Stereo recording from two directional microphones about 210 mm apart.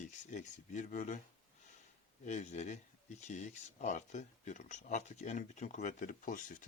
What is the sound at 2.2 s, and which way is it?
Speech, 35° left (ahead or behind).